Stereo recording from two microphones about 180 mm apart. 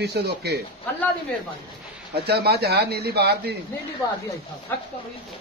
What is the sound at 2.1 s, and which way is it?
Speech, 65° right (ahead or behind).